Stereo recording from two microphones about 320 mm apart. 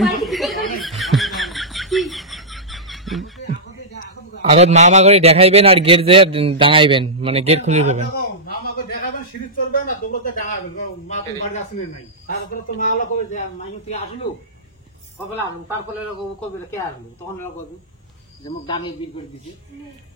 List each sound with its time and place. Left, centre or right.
0.0 s snicker: centre
3.4 s a sound: left
4.4 s a man's voice: right
8.2 s a sound: left
12.3 s a man's voice: left
18.4 s speech: centre